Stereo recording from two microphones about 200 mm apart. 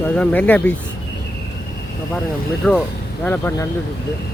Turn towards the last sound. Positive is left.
turn(degrees=10)  # may be behind; listen again after turning